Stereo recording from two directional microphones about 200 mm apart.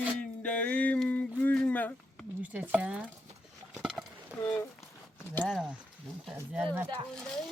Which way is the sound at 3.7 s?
Centre (ahead or behind).